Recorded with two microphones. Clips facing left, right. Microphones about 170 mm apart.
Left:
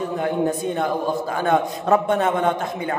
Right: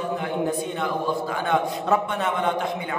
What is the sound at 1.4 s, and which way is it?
A man's voice, 45° left (ahead or behind).